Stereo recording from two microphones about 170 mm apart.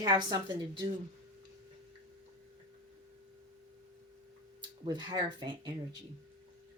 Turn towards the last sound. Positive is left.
turn(degrees=-25)  # may be behind; listen again after turning